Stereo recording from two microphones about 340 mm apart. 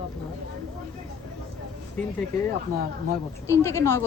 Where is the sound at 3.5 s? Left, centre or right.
Centre.